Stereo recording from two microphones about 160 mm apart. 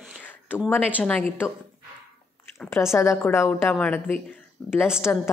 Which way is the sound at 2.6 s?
15° left (ahead or behind).